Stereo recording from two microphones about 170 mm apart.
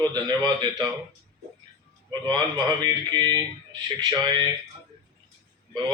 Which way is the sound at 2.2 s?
25° right (ahead or behind).